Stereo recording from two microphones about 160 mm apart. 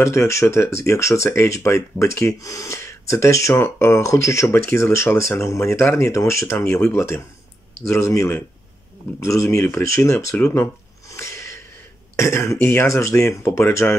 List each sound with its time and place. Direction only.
0.0 s speech: 15° left (ahead or behind)